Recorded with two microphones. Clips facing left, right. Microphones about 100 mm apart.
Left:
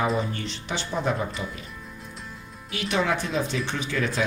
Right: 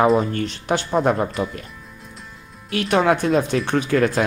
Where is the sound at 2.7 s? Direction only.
55° right (ahead or behind).